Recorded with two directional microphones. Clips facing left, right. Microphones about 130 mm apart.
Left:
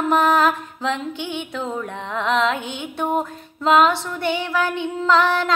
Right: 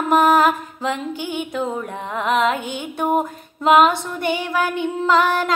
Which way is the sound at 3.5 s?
15° right (ahead or behind).